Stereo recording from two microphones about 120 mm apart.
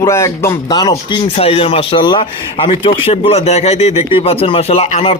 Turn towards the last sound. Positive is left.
turn(degrees=60)  # may be behind; listen again after turning